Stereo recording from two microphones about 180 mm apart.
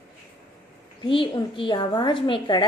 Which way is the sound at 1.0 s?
30° left (ahead or behind).